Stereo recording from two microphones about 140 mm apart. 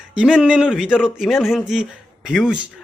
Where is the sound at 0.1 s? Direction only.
10° right (ahead or behind).